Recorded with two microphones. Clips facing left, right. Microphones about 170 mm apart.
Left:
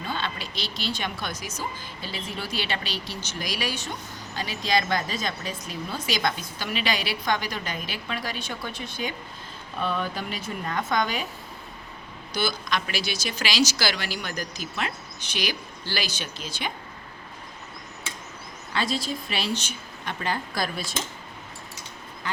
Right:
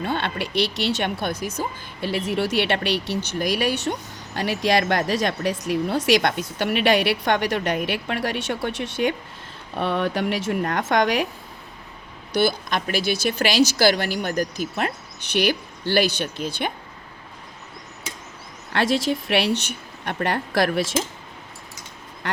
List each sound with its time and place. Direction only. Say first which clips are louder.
0.0 s speech: right 6 dB; 65° right (ahead or behind)
12.3 s speech: right 6 dB; 60° right (ahead or behind)
18.7 s speech: right 7 dB; 80° right